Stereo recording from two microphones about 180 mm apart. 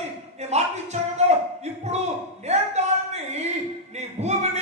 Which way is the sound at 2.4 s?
40° right (ahead or behind).